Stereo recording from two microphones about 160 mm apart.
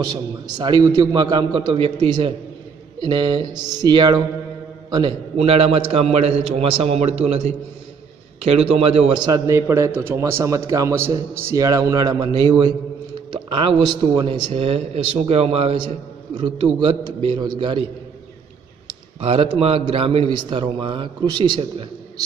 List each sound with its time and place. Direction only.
0.6 s a man's voice: 25° right (ahead or behind)
9.2 s a man's voice: 20° right (ahead or behind)
19.2 s a man's voice: 40° right (ahead or behind)